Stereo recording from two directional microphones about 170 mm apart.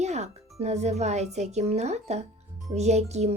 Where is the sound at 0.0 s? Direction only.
40° right (ahead or behind).